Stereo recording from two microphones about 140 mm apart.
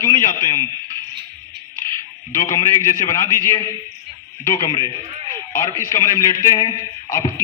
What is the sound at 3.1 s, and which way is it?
A man's voice, 20° left (ahead or behind).